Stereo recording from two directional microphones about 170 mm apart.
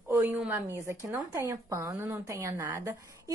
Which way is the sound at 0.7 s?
15° right (ahead or behind).